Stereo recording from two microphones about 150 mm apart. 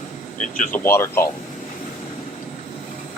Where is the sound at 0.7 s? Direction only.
15° left (ahead or behind).